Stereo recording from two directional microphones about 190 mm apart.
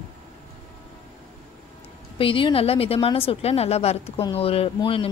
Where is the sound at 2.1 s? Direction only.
30° left (ahead or behind).